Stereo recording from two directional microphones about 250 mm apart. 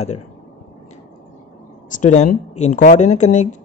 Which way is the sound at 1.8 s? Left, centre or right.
Left.